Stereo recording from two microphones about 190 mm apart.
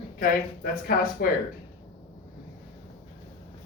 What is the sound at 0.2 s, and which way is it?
A woman's voice, 50° left (ahead or behind).